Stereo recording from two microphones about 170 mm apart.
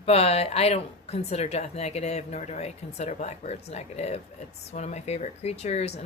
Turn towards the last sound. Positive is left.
turn(degrees=40)  # may be behind; listen again after turning